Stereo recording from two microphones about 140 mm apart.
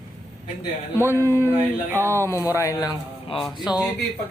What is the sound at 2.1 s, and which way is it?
Speech, 20° left (ahead or behind).